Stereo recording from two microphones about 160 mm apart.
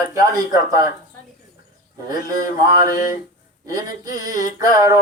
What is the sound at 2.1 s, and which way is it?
Speech, 20° right (ahead or behind).